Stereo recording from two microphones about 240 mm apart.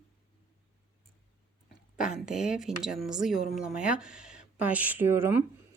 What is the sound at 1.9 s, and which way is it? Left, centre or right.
A woman's voice, centre.